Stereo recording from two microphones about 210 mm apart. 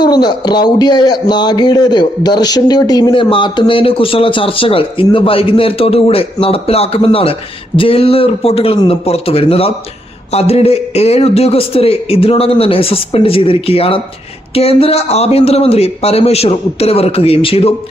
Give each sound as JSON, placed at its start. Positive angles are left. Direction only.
{"t": 0.0, "sound": "speech", "side_deg": 20}